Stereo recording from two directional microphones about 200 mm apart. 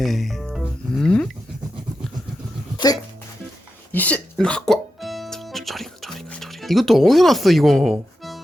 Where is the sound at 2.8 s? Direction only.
20° left (ahead or behind).